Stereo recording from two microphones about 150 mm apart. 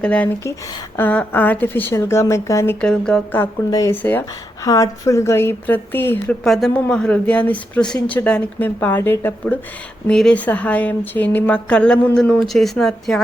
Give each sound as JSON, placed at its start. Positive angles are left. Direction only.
{"t": 0.0, "sound": "speech", "side_deg": 10}
{"t": 2.8, "sound": "speech", "side_deg": 5}
{"t": 3.7, "sound": "speech", "side_deg": 25}
{"t": 3.9, "sound": "speech", "side_deg": 10}
{"t": 6.4, "sound": "speech", "side_deg": 0}